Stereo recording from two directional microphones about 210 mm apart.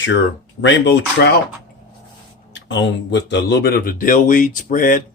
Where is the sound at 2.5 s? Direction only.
60° left (ahead or behind); by 5.0 s 40° left (ahead or behind).